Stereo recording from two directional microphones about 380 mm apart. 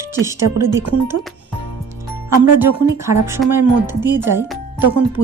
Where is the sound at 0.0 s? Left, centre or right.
Centre.